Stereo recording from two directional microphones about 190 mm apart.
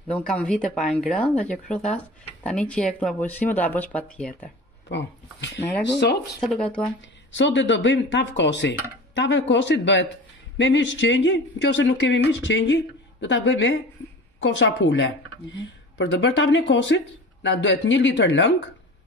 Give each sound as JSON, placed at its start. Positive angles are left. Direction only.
{"t": 0.3, "sound": "speech", "side_deg": 5}
{"t": 4.8, "sound": "speech", "side_deg": 65}
{"t": 6.4, "sound": "speech", "side_deg": 5}
{"t": 7.3, "sound": "speech", "side_deg": 70}